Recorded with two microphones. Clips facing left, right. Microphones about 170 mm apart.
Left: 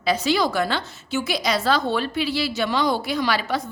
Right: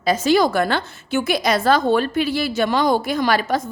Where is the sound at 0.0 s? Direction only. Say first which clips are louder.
Right 5 dB; 45° right (ahead or behind).